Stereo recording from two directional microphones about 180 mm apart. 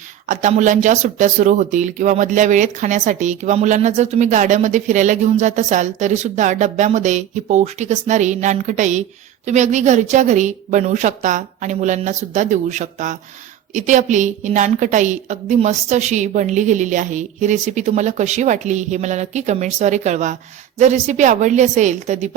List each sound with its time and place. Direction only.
0.3 s a woman's voice: 45° right (ahead or behind)